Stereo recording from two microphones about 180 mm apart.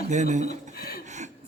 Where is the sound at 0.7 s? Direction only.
55° left (ahead or behind).